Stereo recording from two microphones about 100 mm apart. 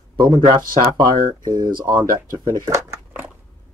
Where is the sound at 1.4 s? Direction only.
40° right (ahead or behind).